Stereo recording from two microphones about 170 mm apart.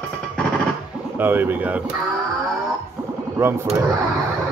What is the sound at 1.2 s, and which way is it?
Speech, 10° right (ahead or behind).